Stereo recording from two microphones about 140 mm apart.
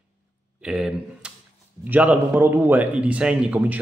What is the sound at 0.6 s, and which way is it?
Speech, 5° right (ahead or behind).